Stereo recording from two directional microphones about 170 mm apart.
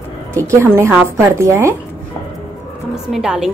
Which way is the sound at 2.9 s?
5° right (ahead or behind).